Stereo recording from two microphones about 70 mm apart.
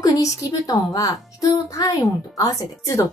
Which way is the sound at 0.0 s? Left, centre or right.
Left.